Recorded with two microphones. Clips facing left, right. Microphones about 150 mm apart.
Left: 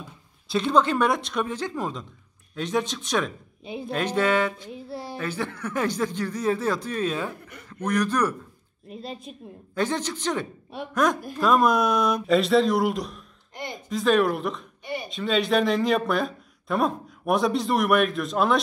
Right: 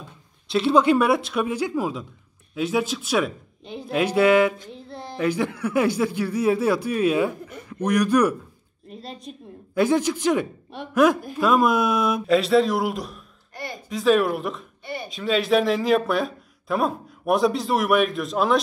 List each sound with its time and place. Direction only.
0.5 s a man's voice: 5° right (ahead or behind)
4.7 s a sound: 10° left (ahead or behind)
5.1 s a man's voice: 15° right (ahead or behind)
8.8 s speech: 5° left (ahead or behind)
9.8 s a man's voice: 10° right (ahead or behind)